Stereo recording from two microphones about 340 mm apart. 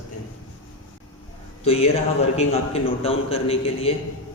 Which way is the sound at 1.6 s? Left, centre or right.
Centre.